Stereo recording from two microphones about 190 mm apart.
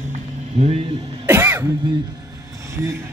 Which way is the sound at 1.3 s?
10° right (ahead or behind).